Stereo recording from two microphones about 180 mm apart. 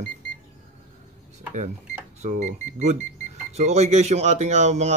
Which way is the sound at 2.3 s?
45° right (ahead or behind).